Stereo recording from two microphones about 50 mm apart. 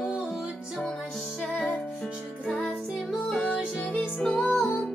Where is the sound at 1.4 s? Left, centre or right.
Centre.